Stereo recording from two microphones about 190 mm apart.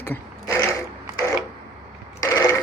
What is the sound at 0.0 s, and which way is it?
Mechanisms, 10° left (ahead or behind).